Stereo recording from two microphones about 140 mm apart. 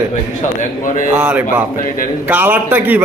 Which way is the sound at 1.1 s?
15° right (ahead or behind).